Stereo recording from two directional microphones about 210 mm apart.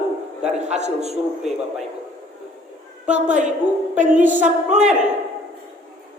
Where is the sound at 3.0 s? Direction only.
35° right (ahead or behind).